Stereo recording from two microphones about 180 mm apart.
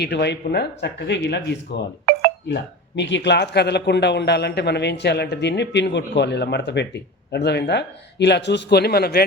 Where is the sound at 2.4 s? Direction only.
75° left (ahead or behind).